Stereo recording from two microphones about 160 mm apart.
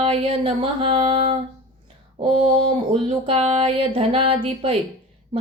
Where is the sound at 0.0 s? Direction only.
35° right (ahead or behind).